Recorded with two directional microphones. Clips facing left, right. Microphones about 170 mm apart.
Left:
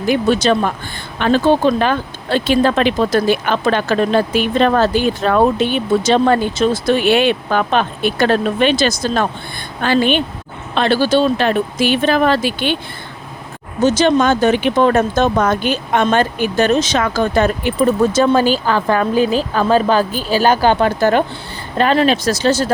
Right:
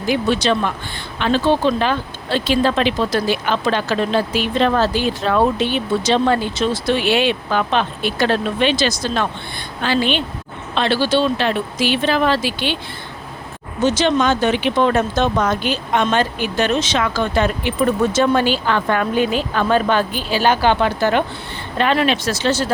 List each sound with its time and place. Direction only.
0.1 s speech: 45° left (ahead or behind)
13.8 s speech: 45° left (ahead or behind)